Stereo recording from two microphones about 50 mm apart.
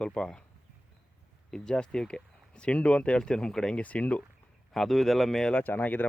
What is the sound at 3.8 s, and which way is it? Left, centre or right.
Speech, left.